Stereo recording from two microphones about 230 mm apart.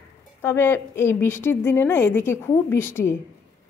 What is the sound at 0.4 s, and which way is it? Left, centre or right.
Speech, centre.